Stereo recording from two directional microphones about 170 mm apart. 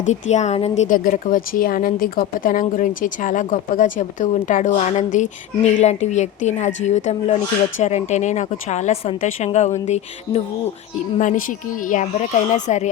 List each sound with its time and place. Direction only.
0.0 s a woman's voice: 45° left (ahead or behind)
0.8 s speech: 50° left (ahead or behind)